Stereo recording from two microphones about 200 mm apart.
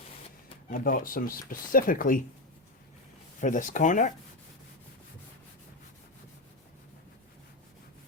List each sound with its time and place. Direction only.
0.7 s speech: 45° left (ahead or behind)
3.4 s speech: 40° left (ahead or behind)